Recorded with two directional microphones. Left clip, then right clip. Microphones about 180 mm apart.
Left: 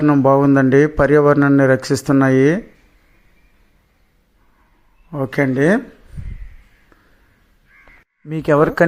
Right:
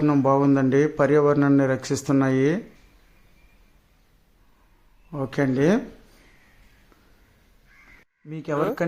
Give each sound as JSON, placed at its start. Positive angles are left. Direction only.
{"t": 0.0, "sound": "speech", "side_deg": 20}
{"t": 0.3, "sound": "speech", "side_deg": 30}
{"t": 5.1, "sound": "speech", "side_deg": 25}
{"t": 8.3, "sound": "speech", "side_deg": 40}